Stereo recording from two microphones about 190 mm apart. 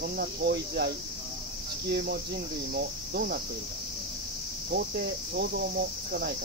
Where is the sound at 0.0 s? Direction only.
55° right (ahead or behind).